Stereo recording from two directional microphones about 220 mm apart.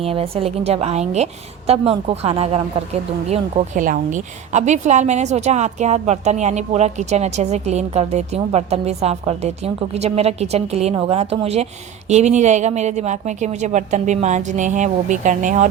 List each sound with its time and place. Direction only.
0.0 s a woman's voice: 25° right (ahead or behind)